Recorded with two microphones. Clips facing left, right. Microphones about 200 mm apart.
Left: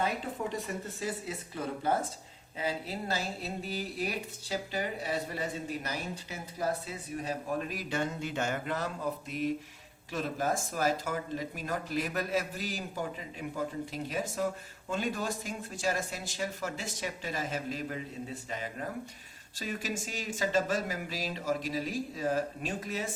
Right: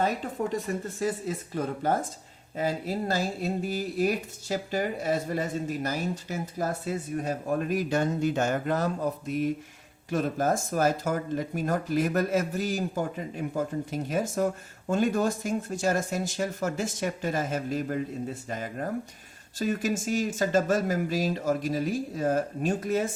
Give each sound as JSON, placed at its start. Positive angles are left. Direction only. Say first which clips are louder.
{"t": 0.5, "sound": "speech", "louder": "right 6 dB", "side_deg": -45}